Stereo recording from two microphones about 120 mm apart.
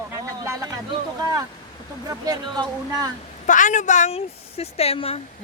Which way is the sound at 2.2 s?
30° right (ahead or behind).